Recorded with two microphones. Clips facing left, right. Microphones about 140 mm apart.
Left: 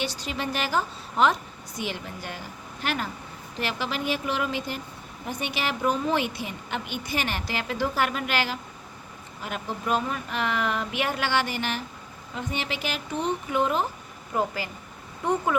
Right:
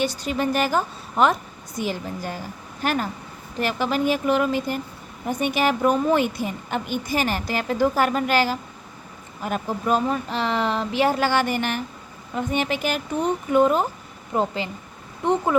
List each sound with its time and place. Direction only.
0.0 s a woman's voice: 50° right (ahead or behind)
14.3 s speech: 25° right (ahead or behind)